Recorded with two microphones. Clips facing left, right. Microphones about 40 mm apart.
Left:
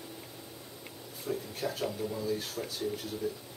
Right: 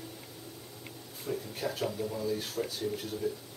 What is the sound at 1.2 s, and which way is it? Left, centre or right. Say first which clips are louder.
Speech: even; centre.